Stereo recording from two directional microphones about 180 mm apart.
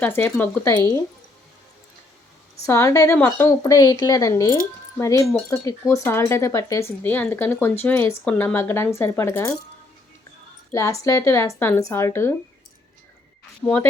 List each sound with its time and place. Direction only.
0.0 s speech: 10° left (ahead or behind)
0.7 s speech: 20° left (ahead or behind)
2.6 s speech: 15° left (ahead or behind)
10.7 s speech: 20° left (ahead or behind)
13.6 s speech: 10° left (ahead or behind)